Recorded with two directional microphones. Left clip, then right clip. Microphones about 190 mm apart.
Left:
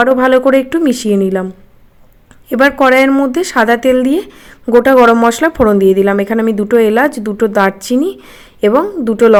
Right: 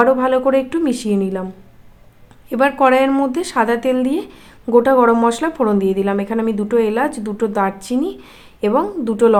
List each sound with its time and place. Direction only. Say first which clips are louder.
0.0 s speech: left 5 dB; 35° left (ahead or behind)
2.5 s speech: left 5 dB; 30° left (ahead or behind)